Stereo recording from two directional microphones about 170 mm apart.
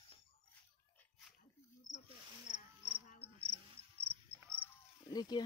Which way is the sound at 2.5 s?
45° left (ahead or behind).